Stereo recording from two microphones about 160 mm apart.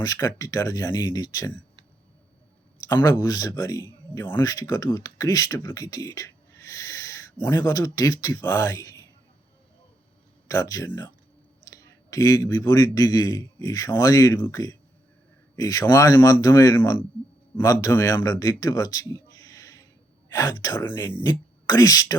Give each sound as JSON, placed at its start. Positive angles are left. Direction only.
{"t": 0.0, "sound": "speech", "side_deg": 20}
{"t": 2.8, "sound": "speech", "side_deg": 20}
{"t": 10.5, "sound": "a man's voice", "side_deg": 20}